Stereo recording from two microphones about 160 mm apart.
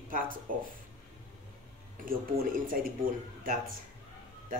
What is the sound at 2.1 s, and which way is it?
Speech, 60° right (ahead or behind).